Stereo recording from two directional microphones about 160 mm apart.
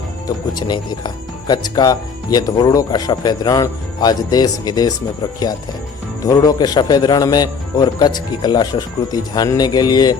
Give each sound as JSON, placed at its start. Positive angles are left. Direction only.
{"t": 0.3, "sound": "speech", "side_deg": 25}
{"t": 6.2, "sound": "speech", "side_deg": 25}